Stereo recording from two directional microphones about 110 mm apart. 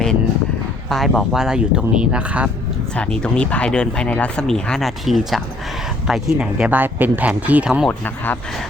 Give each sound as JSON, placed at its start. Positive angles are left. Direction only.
{"t": 0.9, "sound": "speech", "side_deg": 0}
{"t": 2.9, "sound": "speech", "side_deg": 10}
{"t": 7.9, "sound": "speech", "side_deg": 15}